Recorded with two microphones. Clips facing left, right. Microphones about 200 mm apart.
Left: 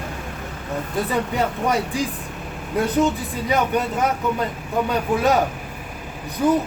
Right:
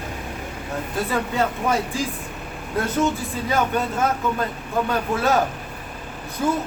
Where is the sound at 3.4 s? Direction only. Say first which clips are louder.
Left 2 dB; 15° left (ahead or behind).